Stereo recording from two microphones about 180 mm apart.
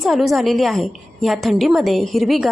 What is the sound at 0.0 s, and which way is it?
A woman's voice, centre (ahead or behind).